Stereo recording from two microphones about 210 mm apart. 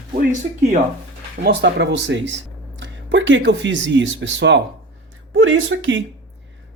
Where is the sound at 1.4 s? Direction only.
55° right (ahead or behind).